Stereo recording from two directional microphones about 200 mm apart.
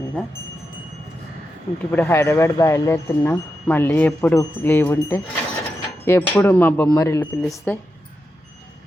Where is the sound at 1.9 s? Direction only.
10° left (ahead or behind).